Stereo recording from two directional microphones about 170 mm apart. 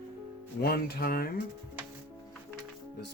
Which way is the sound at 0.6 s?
60° left (ahead or behind).